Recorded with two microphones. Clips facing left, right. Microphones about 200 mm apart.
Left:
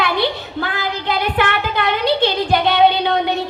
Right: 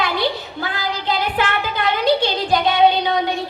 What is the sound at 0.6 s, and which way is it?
Child singing, 60° left (ahead or behind).